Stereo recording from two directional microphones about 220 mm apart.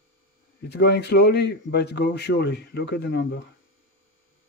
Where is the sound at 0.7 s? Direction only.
50° left (ahead or behind).